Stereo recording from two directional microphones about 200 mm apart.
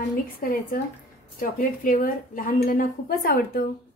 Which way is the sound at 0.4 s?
45° left (ahead or behind).